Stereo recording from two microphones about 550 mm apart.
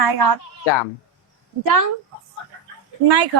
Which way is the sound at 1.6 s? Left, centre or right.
Right.